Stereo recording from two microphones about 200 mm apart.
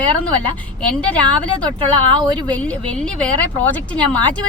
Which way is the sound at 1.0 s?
5° left (ahead or behind).